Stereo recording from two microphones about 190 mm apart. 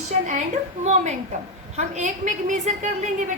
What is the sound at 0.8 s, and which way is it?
A woman's voice, 35° right (ahead or behind).